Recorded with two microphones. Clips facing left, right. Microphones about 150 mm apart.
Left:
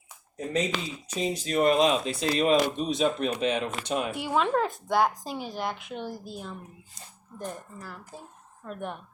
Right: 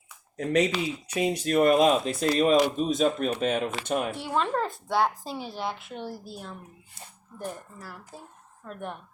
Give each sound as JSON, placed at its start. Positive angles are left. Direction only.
{"t": 0.3, "sound": "speech", "side_deg": -75}
{"t": 4.2, "sound": "speech", "side_deg": 5}